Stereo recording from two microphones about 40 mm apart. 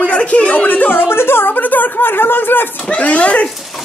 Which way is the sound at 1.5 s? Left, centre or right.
Left.